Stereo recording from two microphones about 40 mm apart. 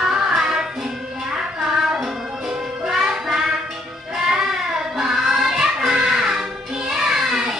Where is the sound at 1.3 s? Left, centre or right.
Centre.